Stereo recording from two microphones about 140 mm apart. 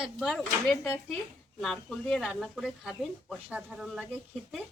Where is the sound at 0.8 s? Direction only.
15° left (ahead or behind).